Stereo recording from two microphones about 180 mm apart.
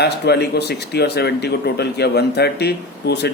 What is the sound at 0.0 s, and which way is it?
A man's voice, 65° left (ahead or behind).